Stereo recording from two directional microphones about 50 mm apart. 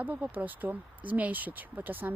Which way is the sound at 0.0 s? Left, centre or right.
Right.